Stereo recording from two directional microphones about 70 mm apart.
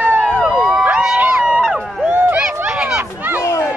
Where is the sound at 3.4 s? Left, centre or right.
Left.